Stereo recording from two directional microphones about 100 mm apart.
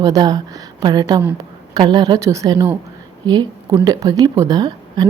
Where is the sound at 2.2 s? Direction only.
35° right (ahead or behind).